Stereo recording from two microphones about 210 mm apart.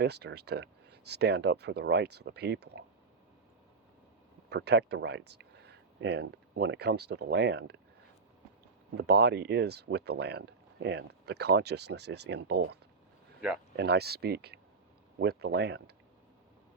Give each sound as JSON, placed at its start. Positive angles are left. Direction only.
{"t": 0.0, "sound": "speech", "side_deg": -50}
{"t": 4.4, "sound": "speech", "side_deg": -55}
{"t": 9.0, "sound": "speech", "side_deg": -50}